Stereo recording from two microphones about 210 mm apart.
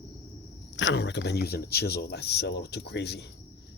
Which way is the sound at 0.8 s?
55° left (ahead or behind).